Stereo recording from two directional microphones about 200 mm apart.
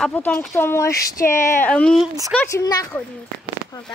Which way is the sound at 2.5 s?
15° left (ahead or behind).